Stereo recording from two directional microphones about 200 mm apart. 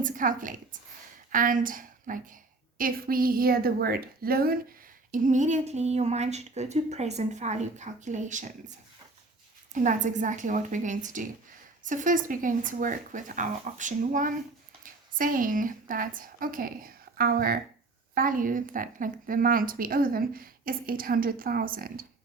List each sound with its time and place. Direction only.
0.0 s a woman's voice: 40° right (ahead or behind)
9.7 s a woman's voice: 40° right (ahead or behind)